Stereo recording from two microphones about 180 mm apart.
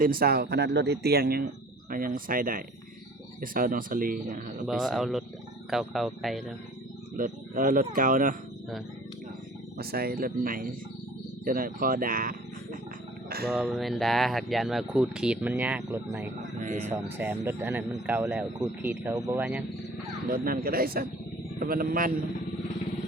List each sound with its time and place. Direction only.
0.0 s speech: 55° right (ahead or behind)
4.6 s speech: centre (ahead or behind)
7.2 s speech: 50° right (ahead or behind)
9.7 s speech: 60° right (ahead or behind)
13.5 s speech: centre (ahead or behind)
16.6 s speech: 40° right (ahead or behind)
16.9 s speech: 10° right (ahead or behind)
20.3 s speech: 55° right (ahead or behind)